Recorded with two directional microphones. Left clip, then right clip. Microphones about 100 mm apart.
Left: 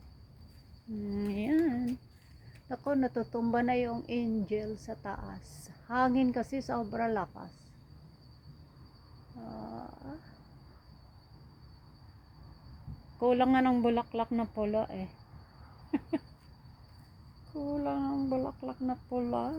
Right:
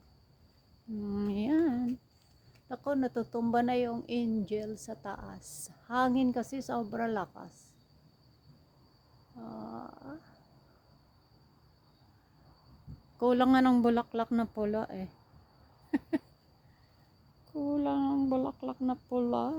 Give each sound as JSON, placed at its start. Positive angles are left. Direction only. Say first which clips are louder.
{"t": 1.1, "sound": "a sound", "louder": "even", "side_deg": -35}
{"t": 2.6, "sound": "a woman's voice", "louder": "left 1 dB", "side_deg": 0}
{"t": 9.4, "sound": "a woman's voice", "louder": "even", "side_deg": -10}
{"t": 13.1, "sound": "speech", "louder": "even", "side_deg": -55}
{"t": 15.9, "sound": "a sound", "louder": "right 1 dB", "side_deg": -60}
{"t": 17.8, "sound": "speech", "louder": "right 2 dB", "side_deg": -90}